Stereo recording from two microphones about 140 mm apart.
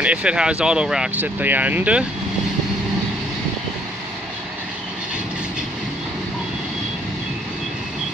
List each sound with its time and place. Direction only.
0.0 s speech: 10° right (ahead or behind)